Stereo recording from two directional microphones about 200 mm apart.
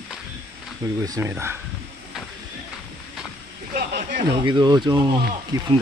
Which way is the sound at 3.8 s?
45° right (ahead or behind).